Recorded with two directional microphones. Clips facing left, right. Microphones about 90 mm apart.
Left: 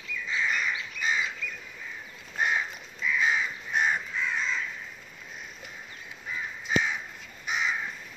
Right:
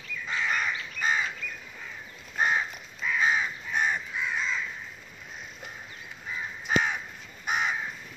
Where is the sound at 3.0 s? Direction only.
40° right (ahead or behind).